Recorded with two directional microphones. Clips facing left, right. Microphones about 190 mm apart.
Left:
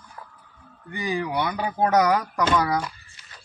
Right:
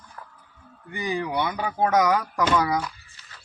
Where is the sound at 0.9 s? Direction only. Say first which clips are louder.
Left 1 dB; 20° right (ahead or behind).